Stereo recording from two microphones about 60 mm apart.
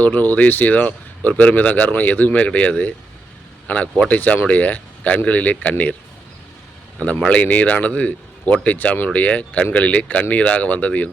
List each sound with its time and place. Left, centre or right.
0.0 s speech: left
7.2 s speech: left